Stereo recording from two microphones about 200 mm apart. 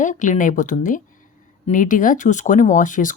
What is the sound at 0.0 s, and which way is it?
Speech, 40° left (ahead or behind).